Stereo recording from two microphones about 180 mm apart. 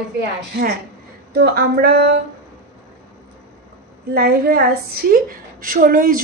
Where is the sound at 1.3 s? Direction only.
65° right (ahead or behind).